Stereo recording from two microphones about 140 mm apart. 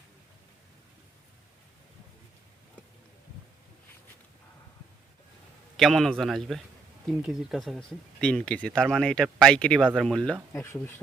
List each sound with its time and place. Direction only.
5.7 s speech: centre (ahead or behind)
10.5 s speech: 15° left (ahead or behind)